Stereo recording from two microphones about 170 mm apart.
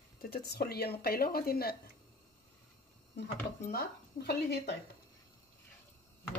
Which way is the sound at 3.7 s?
75° left (ahead or behind).